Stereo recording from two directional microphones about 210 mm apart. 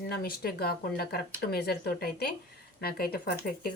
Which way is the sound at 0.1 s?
45° left (ahead or behind).